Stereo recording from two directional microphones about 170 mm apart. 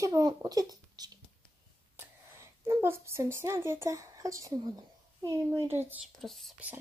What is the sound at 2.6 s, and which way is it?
Speech, 15° right (ahead or behind).